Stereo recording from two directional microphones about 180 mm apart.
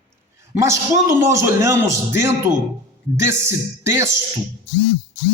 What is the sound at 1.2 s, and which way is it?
A man's voice, 15° right (ahead or behind).